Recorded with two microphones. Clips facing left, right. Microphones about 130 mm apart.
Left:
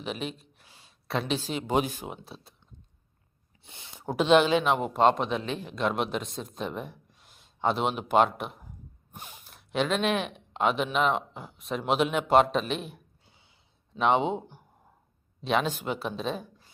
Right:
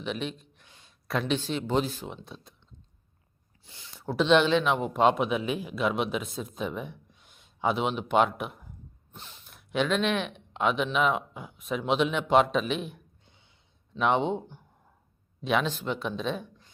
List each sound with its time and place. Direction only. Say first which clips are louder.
0.0 s a sound: right 1 dB; 5° left (ahead or behind)
1.5 s speech: even; 10° left (ahead or behind)
2.2 s a man's voice: right 1 dB; 5° left (ahead or behind)
3.8 s a sound: even; 15° left (ahead or behind)
4.3 s a man's voice: left 1 dB; 5° left (ahead or behind)
9.1 s gasp: left 3 dB; 15° left (ahead or behind)
9.5 s a man's voice: right 1 dB; centre (ahead or behind)
15.7 s a man's voice: even; 10° left (ahead or behind)